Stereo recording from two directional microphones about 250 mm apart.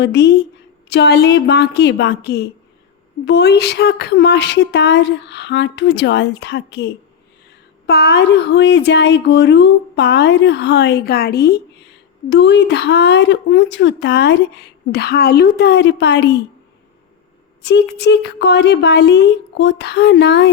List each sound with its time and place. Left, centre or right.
0.0 s a woman's voice: left
17.6 s a woman's voice: left